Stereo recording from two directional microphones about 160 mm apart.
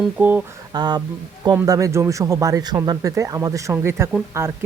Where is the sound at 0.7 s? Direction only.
25° right (ahead or behind).